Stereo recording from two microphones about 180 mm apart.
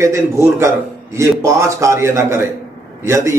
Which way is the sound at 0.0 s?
15° right (ahead or behind).